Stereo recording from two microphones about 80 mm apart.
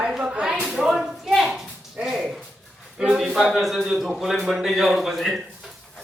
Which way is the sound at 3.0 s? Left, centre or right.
Centre.